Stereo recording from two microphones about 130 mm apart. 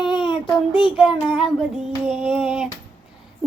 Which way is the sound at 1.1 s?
40° left (ahead or behind).